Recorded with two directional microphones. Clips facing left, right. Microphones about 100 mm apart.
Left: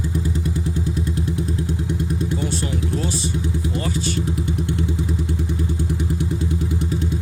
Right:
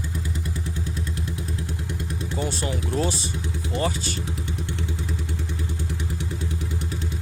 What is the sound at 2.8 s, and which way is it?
Speech, 25° right (ahead or behind).